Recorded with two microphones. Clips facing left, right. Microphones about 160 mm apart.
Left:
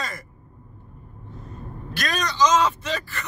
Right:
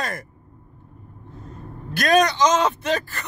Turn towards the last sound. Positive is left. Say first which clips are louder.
# right 5 dB
turn(degrees=-55)  # may be behind; listen again after turning